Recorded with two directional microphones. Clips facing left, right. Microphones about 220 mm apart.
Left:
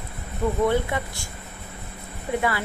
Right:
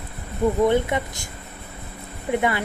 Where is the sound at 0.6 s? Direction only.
20° right (ahead or behind).